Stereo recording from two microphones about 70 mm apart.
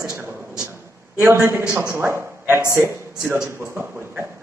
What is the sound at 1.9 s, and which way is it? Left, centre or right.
A man's voice, right.